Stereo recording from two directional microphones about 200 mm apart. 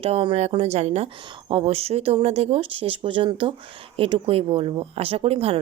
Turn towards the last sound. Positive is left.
turn(degrees=-30)  # may be behind; listen again after turning